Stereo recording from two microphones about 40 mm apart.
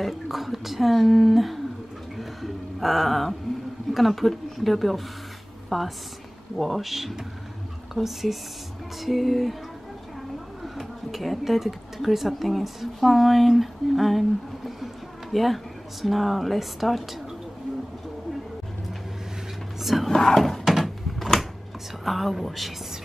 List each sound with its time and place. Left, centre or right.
0.0 s speech: centre
2.1 s music: centre
3.9 s speech: centre
10.6 s speech: centre
19.8 s speech: centre
20.1 s a sound: centre
22.0 s speech: centre